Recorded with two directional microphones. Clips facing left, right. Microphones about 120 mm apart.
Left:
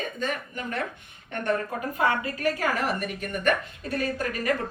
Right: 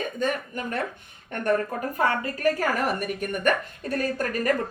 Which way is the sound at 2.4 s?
45° right (ahead or behind).